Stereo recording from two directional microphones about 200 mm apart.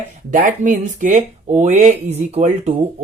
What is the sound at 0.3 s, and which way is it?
Speech, 40° right (ahead or behind).